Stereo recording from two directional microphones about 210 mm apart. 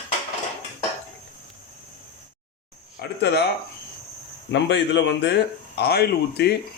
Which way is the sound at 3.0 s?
55° left (ahead or behind).